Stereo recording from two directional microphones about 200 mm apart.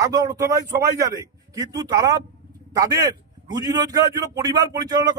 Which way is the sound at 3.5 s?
20° right (ahead or behind).